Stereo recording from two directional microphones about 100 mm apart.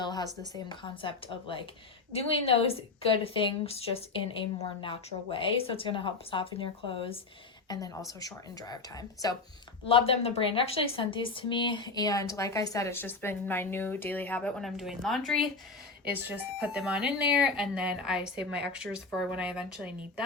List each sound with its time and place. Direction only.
0.0 s a sound: 45° left (ahead or behind)
0.7 s speech: 55° left (ahead or behind)
2.1 s a woman's voice: 80° left
4.8 s speech: 60° left (ahead or behind)
7.7 s speech: 40° left (ahead or behind)
9.9 s a woman's voice: 80° left; by 12.9 s 35° left (ahead or behind)
12.9 s speech: 25° left (ahead or behind)
14.6 s speech: centre (ahead or behind)
16.0 s speech: 15° right (ahead or behind)